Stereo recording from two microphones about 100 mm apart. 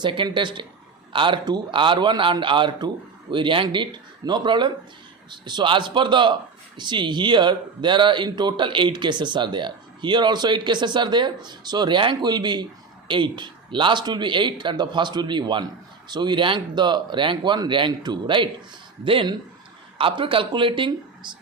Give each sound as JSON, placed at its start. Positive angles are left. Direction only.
{"t": 0.0, "sound": "a man's voice", "side_deg": -55}